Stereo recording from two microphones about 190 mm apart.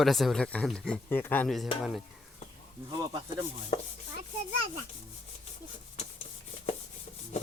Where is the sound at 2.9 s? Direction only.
20° right (ahead or behind).